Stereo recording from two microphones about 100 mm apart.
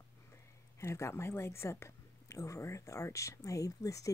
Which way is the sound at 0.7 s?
30° left (ahead or behind).